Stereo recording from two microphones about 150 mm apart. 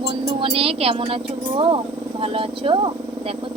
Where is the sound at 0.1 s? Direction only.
35° right (ahead or behind).